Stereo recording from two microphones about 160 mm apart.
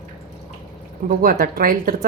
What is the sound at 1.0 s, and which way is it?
Speech, 65° right (ahead or behind).